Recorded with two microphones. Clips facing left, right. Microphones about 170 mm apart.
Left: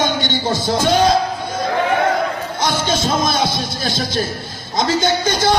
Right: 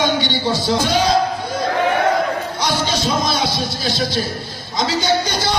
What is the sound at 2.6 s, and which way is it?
Music, 50° left (ahead or behind).